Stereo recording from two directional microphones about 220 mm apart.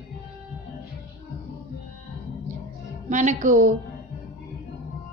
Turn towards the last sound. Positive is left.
turn(degrees=-35)  # may be behind; listen again after turning